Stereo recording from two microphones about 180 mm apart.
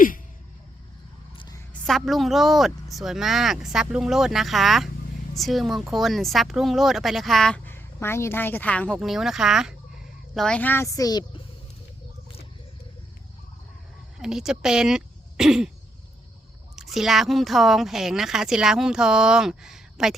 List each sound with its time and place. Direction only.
1.9 s a woman's voice: centre (ahead or behind); by 11.4 s 20° left (ahead or behind)
14.2 s speech: 5° right (ahead or behind)
16.7 s speech: centre (ahead or behind)